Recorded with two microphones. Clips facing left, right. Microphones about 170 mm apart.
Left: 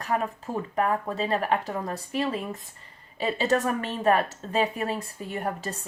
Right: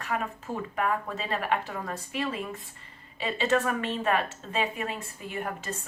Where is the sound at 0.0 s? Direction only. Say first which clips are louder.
Left 4 dB; 35° left (ahead or behind).